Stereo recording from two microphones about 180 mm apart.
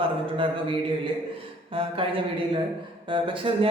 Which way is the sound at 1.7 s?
30° right (ahead or behind).